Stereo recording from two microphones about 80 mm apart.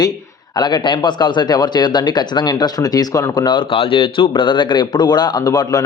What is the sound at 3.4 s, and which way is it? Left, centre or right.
A man's voice, left.